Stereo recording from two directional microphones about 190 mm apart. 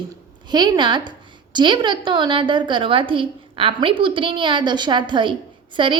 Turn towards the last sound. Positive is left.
turn(degrees=-25)  # may be behind; listen again after turning